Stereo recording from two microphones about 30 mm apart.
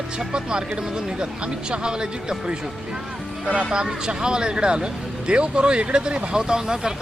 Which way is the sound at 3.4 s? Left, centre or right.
Right.